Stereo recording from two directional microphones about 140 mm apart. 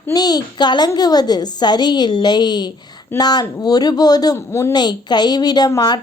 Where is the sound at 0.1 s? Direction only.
30° left (ahead or behind).